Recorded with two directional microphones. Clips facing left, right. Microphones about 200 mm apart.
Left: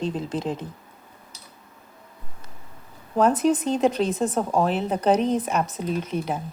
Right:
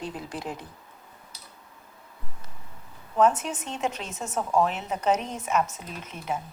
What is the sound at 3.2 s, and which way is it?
Speech, 35° left (ahead or behind).